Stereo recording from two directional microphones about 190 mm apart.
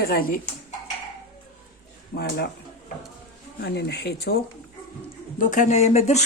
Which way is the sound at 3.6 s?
60° left (ahead or behind).